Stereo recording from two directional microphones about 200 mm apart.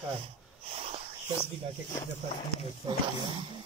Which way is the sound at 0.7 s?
30° right (ahead or behind).